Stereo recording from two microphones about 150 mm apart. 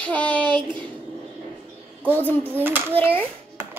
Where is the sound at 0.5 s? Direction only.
30° right (ahead or behind).